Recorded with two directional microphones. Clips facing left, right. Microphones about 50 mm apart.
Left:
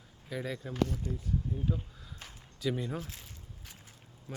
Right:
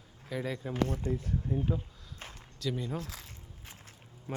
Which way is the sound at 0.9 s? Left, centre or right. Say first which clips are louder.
Right 4 dB; right.